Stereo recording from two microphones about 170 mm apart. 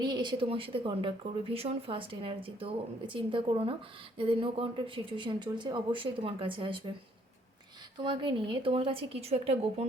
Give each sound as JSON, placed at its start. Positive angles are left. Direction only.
{"t": 0.0, "sound": "speech", "side_deg": -25}
{"t": 7.9, "sound": "speech", "side_deg": -30}